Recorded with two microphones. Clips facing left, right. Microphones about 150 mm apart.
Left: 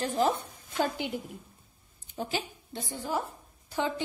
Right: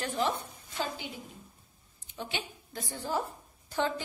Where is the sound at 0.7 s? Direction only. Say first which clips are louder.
Left 6 dB; 60° left (ahead or behind).